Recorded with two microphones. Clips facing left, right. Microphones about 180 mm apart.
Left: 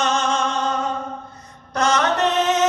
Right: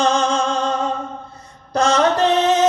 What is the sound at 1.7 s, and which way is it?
Mantra, 30° right (ahead or behind).